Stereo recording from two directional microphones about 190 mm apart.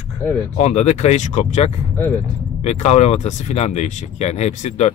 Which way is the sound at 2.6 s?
35° left (ahead or behind).